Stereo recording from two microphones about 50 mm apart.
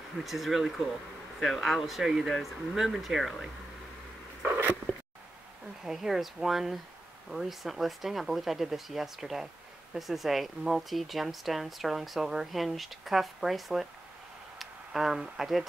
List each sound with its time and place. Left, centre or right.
0.2 s speech: centre
5.9 s speech: centre